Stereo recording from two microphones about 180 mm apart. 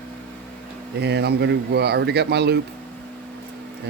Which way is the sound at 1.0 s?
65° right (ahead or behind).